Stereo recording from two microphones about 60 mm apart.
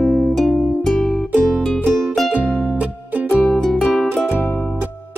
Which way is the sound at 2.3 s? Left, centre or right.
Right.